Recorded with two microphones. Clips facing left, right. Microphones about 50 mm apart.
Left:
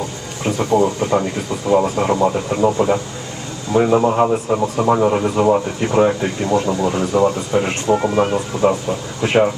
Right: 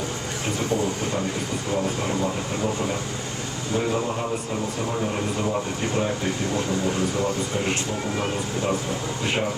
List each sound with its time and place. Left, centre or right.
0.7 s speech: left
4.8 s speech: left
5.1 s speech: left